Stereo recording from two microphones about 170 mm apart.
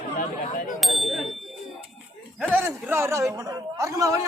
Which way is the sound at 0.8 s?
Centre (ahead or behind).